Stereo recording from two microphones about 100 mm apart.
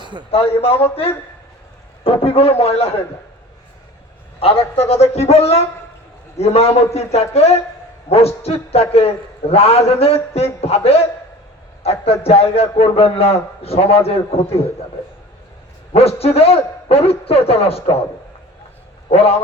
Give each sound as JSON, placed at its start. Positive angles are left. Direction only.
{"t": 0.0, "sound": "a sound", "side_deg": -50}
{"t": 0.3, "sound": "a man's voice", "side_deg": 75}
{"t": 2.0, "sound": "a man's voice", "side_deg": 75}
{"t": 4.4, "sound": "a man's voice", "side_deg": 75}
{"t": 12.7, "sound": "a man's voice", "side_deg": 75}
{"t": 15.9, "sound": "a man's voice", "side_deg": 90}
{"t": 19.1, "sound": "a man's voice", "side_deg": 90}